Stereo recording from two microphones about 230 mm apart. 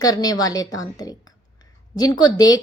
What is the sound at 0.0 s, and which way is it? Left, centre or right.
A woman's voice, centre.